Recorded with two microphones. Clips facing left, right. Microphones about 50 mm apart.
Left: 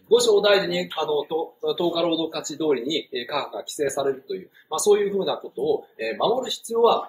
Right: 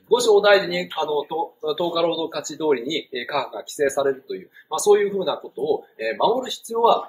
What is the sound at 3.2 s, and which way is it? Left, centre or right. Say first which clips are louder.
Speech: right 2 dB; right.